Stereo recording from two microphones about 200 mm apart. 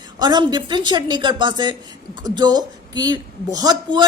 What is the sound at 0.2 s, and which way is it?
A woman's voice, 20° right (ahead or behind).